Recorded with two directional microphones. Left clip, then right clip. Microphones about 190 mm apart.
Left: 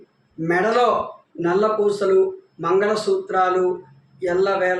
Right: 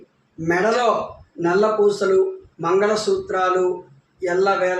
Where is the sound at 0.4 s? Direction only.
10° right (ahead or behind).